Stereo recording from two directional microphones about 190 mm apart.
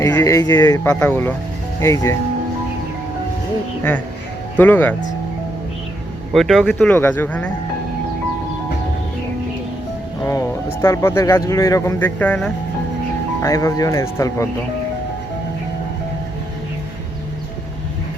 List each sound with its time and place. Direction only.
0.0 s speech: 15° left (ahead or behind)
0.9 s speech: 10° left (ahead or behind)
4.5 s speech: 10° left (ahead or behind)
6.3 s speech: centre (ahead or behind)
10.2 s speech: 15° left (ahead or behind)
13.4 s speech: 15° left (ahead or behind)